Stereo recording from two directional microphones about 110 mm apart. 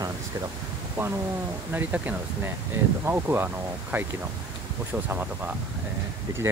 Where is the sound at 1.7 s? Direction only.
15° right (ahead or behind).